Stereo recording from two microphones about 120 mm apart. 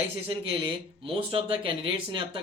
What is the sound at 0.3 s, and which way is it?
Speech, 50° right (ahead or behind).